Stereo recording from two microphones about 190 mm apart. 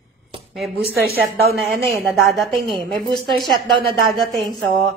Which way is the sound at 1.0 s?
55° right (ahead or behind).